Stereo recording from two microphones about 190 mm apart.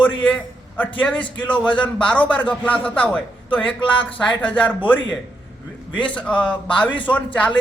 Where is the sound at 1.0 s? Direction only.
10° left (ahead or behind).